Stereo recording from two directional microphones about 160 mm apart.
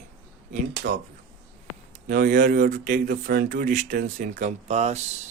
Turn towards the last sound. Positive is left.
turn(degrees=-45)  # may be behind; listen again after turning